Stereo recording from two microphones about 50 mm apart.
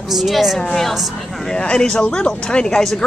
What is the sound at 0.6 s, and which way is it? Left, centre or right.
A woman's voice, centre.